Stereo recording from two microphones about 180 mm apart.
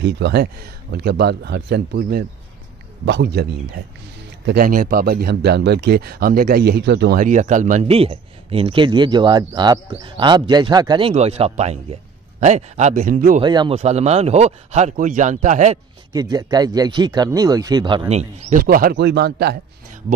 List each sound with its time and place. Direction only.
0.0 s speech: 70° right (ahead or behind)
3.1 s speech: 70° right (ahead or behind)
4.5 s speech: 50° right (ahead or behind); by 7.2 s 70° right (ahead or behind)
7.2 s speech: 45° right (ahead or behind)
7.8 s speech: 30° right (ahead or behind)
13.4 s speech: 25° right (ahead or behind)
13.7 s speech: 35° right (ahead or behind)
16.1 s speech: 20° right (ahead or behind)
18.6 s speech: 55° right (ahead or behind)